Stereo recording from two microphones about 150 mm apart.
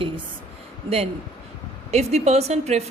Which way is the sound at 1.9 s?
45° right (ahead or behind).